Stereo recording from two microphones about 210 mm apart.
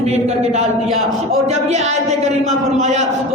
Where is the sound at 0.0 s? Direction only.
30° right (ahead or behind).